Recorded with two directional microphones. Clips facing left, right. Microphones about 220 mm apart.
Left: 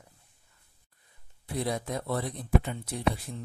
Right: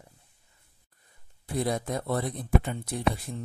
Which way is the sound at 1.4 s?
45° right (ahead or behind).